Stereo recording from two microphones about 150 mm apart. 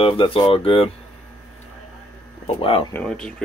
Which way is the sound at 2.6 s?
40° left (ahead or behind).